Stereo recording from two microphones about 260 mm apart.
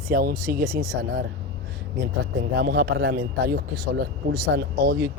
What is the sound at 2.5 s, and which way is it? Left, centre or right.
A man's voice, right.